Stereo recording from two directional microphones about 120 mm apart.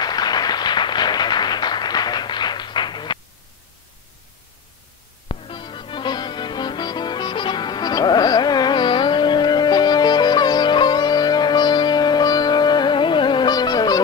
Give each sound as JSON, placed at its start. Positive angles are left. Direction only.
{"t": 0.0, "sound": "applause", "side_deg": 35}
{"t": 5.3, "sound": "music", "side_deg": 45}